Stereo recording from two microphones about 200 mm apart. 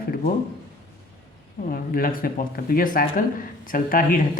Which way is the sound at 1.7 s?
45° left (ahead or behind).